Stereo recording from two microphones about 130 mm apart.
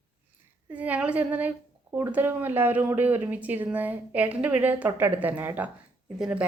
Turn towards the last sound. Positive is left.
turn(degrees=-10)  # may be behind; listen again after turning